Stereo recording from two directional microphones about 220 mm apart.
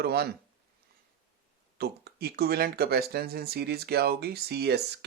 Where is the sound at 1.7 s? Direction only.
45° right (ahead or behind).